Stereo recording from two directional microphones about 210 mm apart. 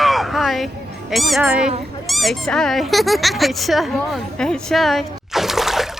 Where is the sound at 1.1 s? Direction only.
Centre (ahead or behind).